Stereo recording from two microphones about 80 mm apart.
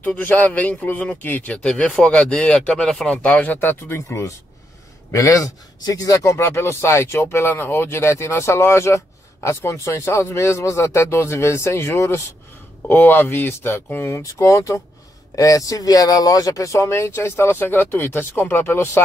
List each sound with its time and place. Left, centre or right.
0.0 s speech: centre
3.5 s speech: left
12.8 s speech: left
14.1 s speech: left